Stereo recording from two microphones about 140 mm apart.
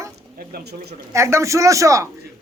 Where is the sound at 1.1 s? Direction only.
20° right (ahead or behind).